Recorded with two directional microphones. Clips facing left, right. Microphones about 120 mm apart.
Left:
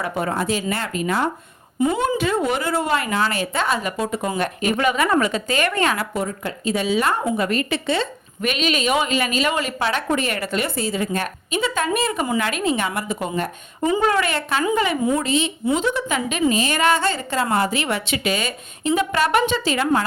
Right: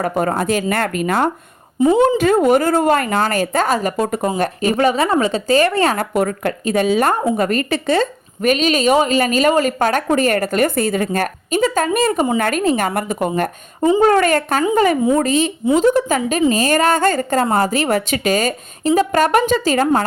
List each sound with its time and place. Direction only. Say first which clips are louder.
0.0 s a woman's voice: right 5 dB; 45° right (ahead or behind)
6.1 s a woman's voice: right 7 dB; 60° right (ahead or behind); by 20.1 s 45° right (ahead or behind)